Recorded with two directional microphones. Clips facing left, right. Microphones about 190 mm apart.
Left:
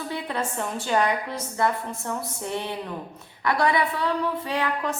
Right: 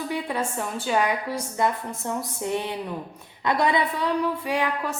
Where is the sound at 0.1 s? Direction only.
10° right (ahead or behind).